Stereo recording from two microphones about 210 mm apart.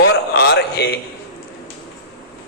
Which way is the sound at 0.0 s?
50° left (ahead or behind).